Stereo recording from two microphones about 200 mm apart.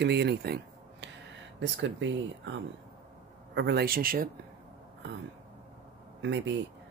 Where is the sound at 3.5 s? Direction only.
55° right (ahead or behind).